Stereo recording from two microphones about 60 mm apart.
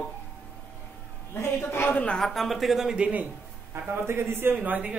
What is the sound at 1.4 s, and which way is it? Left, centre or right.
Speech, left.